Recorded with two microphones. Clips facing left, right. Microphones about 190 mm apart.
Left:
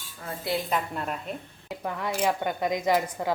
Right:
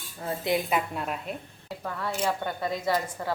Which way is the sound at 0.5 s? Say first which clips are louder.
Right 1 dB; 5° right (ahead or behind).